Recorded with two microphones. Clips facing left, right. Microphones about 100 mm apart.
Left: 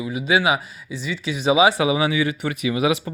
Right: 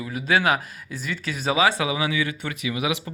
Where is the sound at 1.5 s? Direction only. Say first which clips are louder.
Left 5 dB; 15° left (ahead or behind).